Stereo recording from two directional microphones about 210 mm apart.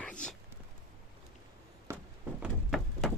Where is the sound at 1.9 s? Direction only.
15° right (ahead or behind).